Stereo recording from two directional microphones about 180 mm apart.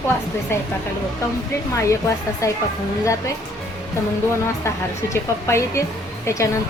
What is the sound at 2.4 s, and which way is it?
Speech, 15° left (ahead or behind).